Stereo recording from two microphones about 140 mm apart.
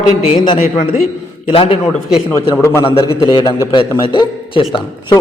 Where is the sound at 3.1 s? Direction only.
35° left (ahead or behind).